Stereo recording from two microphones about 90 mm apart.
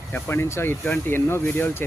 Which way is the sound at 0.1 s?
30° left (ahead or behind).